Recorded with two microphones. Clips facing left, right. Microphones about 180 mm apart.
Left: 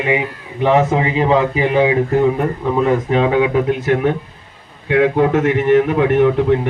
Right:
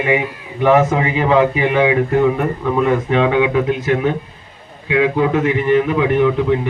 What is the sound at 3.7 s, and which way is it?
A man's voice, 50° left (ahead or behind).